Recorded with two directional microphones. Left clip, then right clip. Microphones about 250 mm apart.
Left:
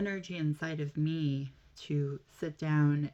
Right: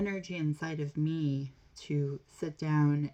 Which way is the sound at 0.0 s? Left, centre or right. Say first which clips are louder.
Right 1 dB; centre.